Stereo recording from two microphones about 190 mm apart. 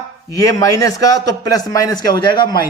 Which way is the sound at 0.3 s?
15° left (ahead or behind).